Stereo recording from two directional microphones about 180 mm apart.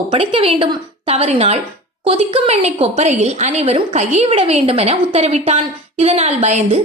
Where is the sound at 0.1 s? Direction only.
30° right (ahead or behind).